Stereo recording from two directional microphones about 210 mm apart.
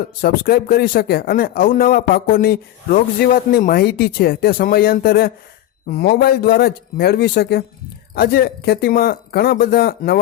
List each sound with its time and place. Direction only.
0.2 s speech: 45° left (ahead or behind)